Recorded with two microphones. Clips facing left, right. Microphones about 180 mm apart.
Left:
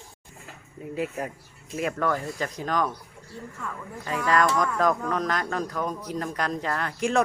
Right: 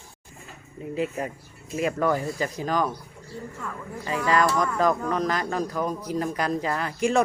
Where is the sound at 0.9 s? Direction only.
Centre (ahead or behind).